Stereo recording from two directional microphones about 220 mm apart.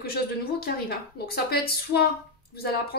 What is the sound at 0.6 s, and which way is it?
Speech, 45° left (ahead or behind).